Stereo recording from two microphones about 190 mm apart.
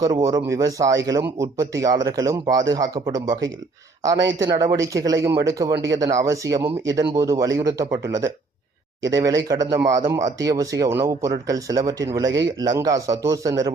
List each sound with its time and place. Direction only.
0.0 s speech: 15° right (ahead or behind)